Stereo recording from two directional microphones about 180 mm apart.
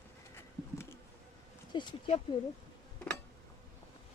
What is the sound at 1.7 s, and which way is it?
Speech, 30° left (ahead or behind).